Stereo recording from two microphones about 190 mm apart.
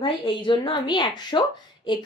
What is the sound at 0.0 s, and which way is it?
A woman's voice, 25° left (ahead or behind).